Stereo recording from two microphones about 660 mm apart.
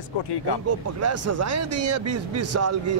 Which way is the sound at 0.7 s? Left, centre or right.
Right.